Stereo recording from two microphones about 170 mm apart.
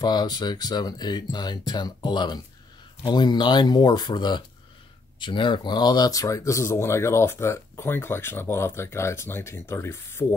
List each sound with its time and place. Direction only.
0.0 s speech: 25° left (ahead or behind)